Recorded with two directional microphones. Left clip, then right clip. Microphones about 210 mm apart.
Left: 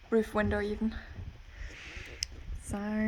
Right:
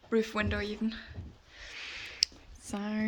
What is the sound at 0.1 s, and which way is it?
Speech, 35° left (ahead or behind).